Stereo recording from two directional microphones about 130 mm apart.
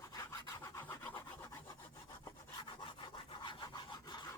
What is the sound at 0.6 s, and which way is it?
Rub, 15° left (ahead or behind).